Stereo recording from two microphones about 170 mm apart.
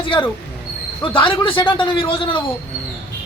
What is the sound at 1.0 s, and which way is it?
A man's voice, 30° left (ahead or behind).